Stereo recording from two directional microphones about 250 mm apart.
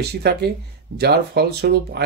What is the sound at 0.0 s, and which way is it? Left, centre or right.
Speech, right.